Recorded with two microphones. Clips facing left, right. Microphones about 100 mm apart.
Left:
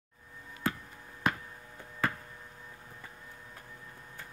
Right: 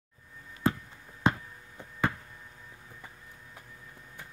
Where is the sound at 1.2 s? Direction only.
25° right (ahead or behind).